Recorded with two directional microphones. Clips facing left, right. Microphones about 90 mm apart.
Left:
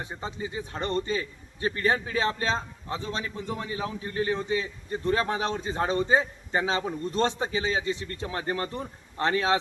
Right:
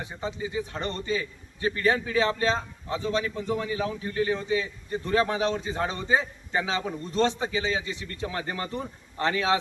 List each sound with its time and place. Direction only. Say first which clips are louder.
0.5 s a man's voice: left 1 dB; 35° left (ahead or behind)